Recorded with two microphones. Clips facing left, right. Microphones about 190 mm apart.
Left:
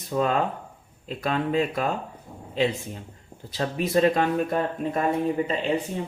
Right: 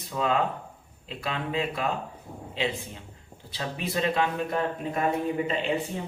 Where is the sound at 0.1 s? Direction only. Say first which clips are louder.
Left 3 dB; 45° left (ahead or behind).